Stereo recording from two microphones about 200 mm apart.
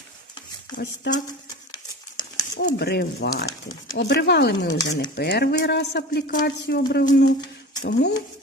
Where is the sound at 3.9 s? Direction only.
60° left (ahead or behind).